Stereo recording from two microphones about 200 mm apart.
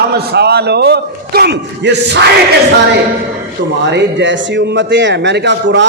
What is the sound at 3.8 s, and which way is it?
A man's voice, 60° right (ahead or behind).